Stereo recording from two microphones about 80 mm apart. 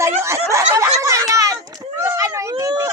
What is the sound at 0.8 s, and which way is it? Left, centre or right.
Chatter, right.